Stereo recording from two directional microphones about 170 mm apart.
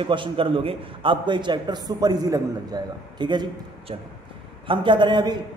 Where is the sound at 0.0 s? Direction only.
30° right (ahead or behind).